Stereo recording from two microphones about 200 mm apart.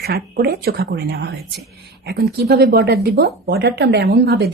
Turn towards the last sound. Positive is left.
turn(degrees=-55)  # may be behind; listen again after turning